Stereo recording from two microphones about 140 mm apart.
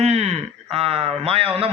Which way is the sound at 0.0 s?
50° right (ahead or behind).